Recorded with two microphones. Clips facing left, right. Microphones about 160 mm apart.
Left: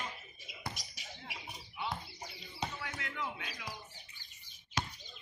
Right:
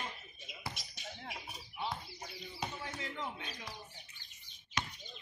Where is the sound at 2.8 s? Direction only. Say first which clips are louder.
Even; 30° right (ahead or behind).